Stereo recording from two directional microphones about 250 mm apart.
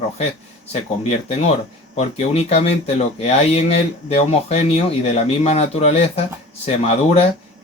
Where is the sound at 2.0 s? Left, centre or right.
Left.